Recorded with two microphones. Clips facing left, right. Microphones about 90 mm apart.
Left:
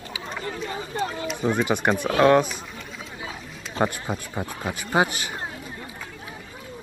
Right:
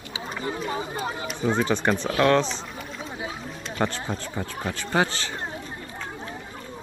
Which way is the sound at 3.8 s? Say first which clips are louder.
Left 2 dB; 15° left (ahead or behind).